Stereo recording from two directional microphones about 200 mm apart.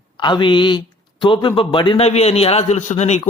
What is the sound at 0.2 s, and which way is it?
A man's voice, 25° left (ahead or behind).